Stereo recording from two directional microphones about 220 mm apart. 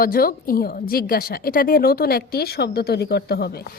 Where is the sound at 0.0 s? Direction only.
40° left (ahead or behind).